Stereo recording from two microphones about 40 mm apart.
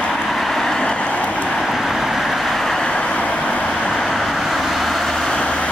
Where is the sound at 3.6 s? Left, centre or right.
Centre.